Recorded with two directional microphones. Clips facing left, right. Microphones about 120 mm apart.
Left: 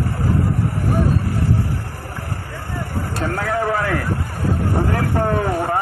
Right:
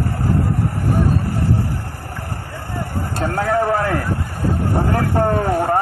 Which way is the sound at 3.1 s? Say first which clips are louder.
Right 4 dB; 35° right (ahead or behind).